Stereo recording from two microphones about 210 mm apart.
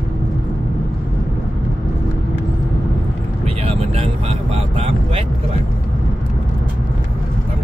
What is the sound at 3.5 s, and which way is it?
Vehicle, 30° right (ahead or behind).